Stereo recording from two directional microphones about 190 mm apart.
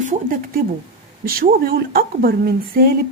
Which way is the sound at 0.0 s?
45° right (ahead or behind).